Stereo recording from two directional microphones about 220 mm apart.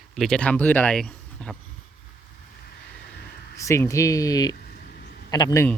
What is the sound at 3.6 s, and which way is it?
Speech, 15° left (ahead or behind).